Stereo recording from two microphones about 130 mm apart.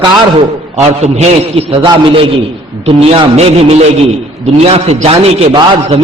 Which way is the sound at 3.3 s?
55° right (ahead or behind).